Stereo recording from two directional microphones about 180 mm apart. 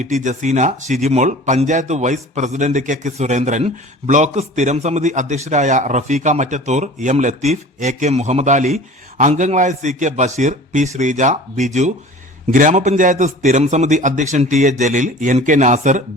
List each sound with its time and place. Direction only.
0.0 s a man's voice: 45° right (ahead or behind)